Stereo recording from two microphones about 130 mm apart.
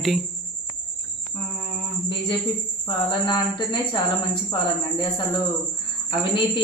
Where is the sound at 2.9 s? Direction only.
35° left (ahead or behind).